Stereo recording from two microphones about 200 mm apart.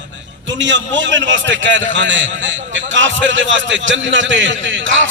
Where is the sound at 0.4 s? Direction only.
65° right (ahead or behind).